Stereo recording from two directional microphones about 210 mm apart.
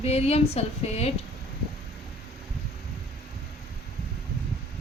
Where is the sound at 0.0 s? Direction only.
30° left (ahead or behind).